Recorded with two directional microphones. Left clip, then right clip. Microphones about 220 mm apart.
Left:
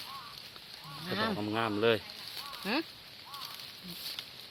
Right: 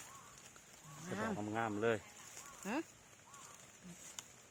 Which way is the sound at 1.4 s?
5° left (ahead or behind).